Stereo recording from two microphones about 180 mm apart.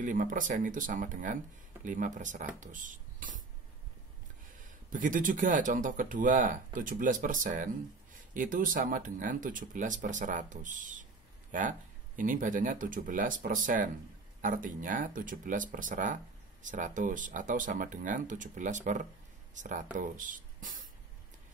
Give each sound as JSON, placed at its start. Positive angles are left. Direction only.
{"t": 0.0, "sound": "speech", "side_deg": -45}
{"t": 4.9, "sound": "speech", "side_deg": -45}